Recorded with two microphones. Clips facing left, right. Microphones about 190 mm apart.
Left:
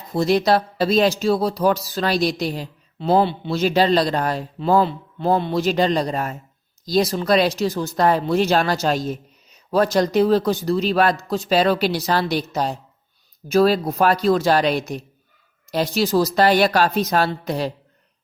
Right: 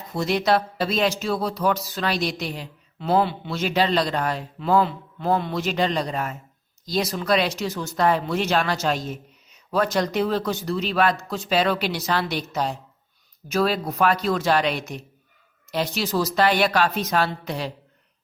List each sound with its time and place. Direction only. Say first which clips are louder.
0.1 s speech: left 4 dB; 35° left (ahead or behind)